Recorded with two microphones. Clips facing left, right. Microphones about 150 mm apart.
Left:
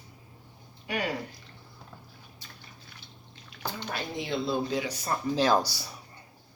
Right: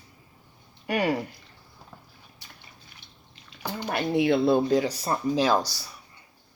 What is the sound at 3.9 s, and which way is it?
Speech, 65° right (ahead or behind).